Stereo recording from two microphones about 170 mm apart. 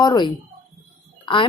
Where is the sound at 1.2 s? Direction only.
30° left (ahead or behind).